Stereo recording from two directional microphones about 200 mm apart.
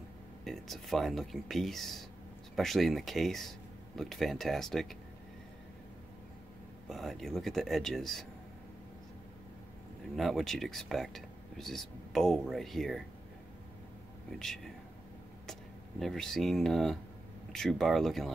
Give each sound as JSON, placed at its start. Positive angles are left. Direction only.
{"t": 0.5, "sound": "speech", "side_deg": 0}
{"t": 6.9, "sound": "speech", "side_deg": 0}
{"t": 10.1, "sound": "speech", "side_deg": 0}
{"t": 14.4, "sound": "speech", "side_deg": 0}
{"t": 16.0, "sound": "speech", "side_deg": 0}